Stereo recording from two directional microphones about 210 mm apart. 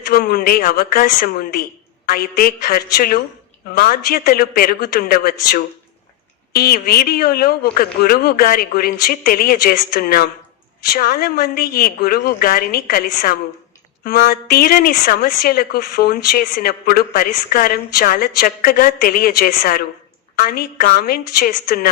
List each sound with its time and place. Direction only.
0.1 s a woman's voice: 45° left (ahead or behind)